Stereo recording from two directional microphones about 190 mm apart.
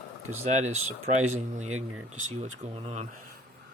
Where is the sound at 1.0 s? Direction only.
35° right (ahead or behind).